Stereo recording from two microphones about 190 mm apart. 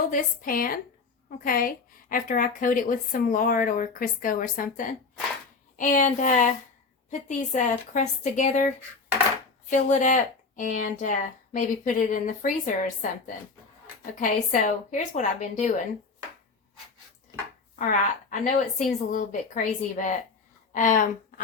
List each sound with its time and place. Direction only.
0.1 s a woman's voice: 50° left (ahead or behind)
9.6 s a woman's voice: 40° left (ahead or behind)
17.7 s a woman's voice: 45° left (ahead or behind)